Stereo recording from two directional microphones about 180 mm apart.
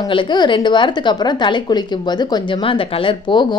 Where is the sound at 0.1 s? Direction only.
25° left (ahead or behind).